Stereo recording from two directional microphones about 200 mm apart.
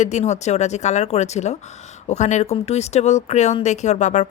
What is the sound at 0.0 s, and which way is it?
Speech, 35° left (ahead or behind).